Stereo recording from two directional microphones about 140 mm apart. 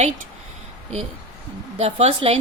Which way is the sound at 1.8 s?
45° right (ahead or behind).